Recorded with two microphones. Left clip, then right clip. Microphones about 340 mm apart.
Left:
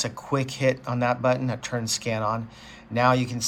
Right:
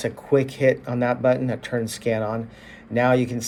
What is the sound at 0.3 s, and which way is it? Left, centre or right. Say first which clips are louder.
Speech: right 5 dB; centre.